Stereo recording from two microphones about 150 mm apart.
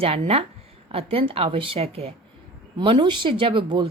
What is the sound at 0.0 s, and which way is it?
Speech, 40° right (ahead or behind).